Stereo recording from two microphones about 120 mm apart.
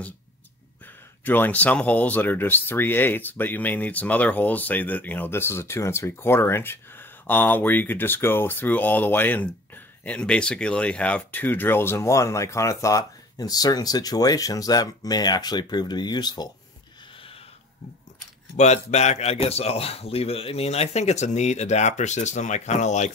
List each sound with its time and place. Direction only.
1.2 s speech: 15° left (ahead or behind); by 16.4 s 35° left (ahead or behind)
18.6 s speech: 70° left (ahead or behind)